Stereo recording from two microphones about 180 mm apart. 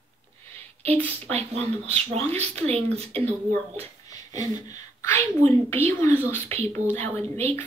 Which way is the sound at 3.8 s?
20° left (ahead or behind).